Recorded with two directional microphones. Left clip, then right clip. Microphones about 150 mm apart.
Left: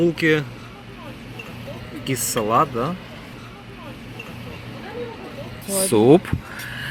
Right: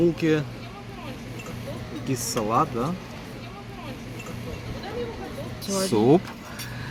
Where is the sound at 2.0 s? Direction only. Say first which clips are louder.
Left 5 dB; 55° left (ahead or behind).